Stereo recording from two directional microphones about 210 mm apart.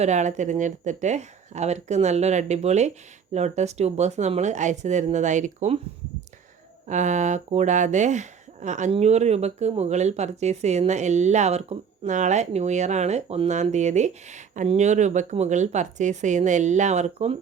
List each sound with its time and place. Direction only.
0.0 s speech: 35° right (ahead or behind)
6.8 s speech: 35° right (ahead or behind)